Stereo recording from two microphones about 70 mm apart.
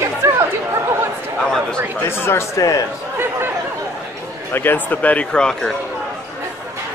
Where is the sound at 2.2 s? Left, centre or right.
Left.